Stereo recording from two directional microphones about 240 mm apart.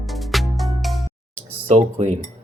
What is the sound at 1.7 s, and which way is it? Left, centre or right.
Speech, right.